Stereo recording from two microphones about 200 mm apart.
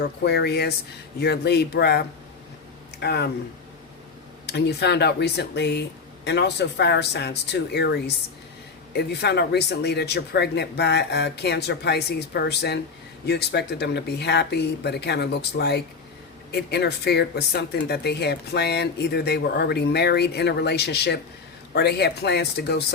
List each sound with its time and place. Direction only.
0.0 s speech: 55° left (ahead or behind)
3.0 s speech: 55° left (ahead or behind)
4.4 s speech: 55° left (ahead or behind)